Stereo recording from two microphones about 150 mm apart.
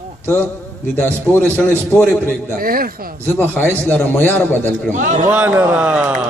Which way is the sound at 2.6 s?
75° right (ahead or behind).